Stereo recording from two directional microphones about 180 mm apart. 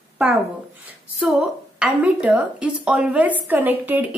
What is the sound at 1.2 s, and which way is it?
A woman's voice, 5° right (ahead or behind).